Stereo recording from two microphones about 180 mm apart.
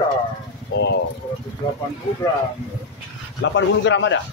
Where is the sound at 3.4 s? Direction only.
85° left.